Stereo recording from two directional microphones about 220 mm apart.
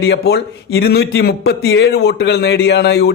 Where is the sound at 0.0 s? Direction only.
50° left (ahead or behind).